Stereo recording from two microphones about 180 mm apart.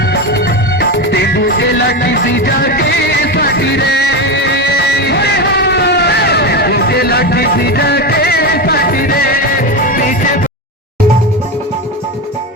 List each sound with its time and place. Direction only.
0.1 s music: 65° left (ahead or behind); by 10.4 s 50° left (ahead or behind)